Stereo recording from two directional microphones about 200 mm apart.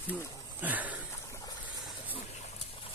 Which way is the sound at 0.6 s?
10° right (ahead or behind).